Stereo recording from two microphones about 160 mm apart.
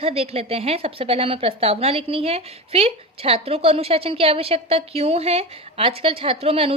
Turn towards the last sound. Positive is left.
turn(degrees=-40)  # may be behind; listen again after turning